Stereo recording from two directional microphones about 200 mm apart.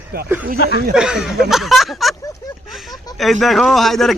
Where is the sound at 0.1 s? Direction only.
50° right (ahead or behind).